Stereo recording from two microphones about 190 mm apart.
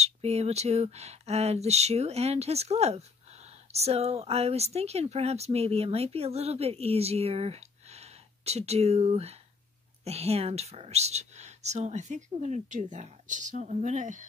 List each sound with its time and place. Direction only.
0.0 s speech: 35° right (ahead or behind)